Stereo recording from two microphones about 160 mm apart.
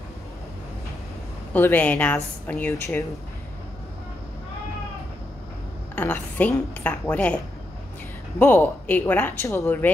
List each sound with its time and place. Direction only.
1.5 s speech: 10° left (ahead or behind)
5.9 s a woman's voice: 10° left (ahead or behind)
8.4 s speech: 10° left (ahead or behind)